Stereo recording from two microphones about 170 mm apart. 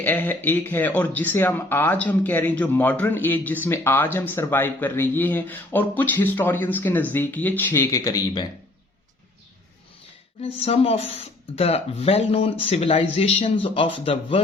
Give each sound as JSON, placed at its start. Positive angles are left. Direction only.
{"t": 0.0, "sound": "speech", "side_deg": 10}
{"t": 10.4, "sound": "speech", "side_deg": 35}